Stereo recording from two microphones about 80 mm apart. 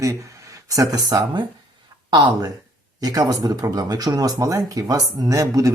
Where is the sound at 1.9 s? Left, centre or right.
Right.